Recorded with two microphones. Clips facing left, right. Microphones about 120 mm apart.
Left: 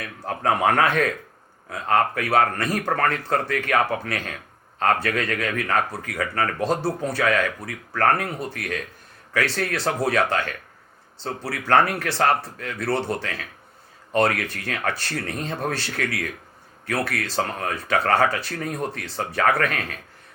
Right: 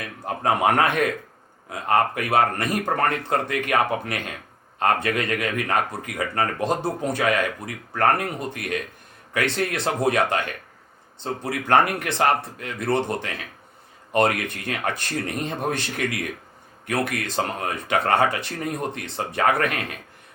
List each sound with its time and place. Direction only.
0.0 s speech: 15° right (ahead or behind)